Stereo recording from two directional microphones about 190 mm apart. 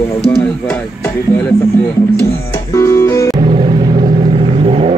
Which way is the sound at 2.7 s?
15° left (ahead or behind).